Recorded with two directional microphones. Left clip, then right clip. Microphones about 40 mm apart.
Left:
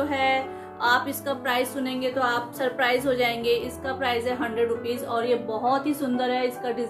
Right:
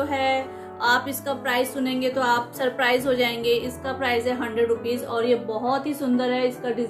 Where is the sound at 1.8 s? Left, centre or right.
Right.